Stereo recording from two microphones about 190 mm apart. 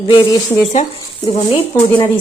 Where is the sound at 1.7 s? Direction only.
10° left (ahead or behind).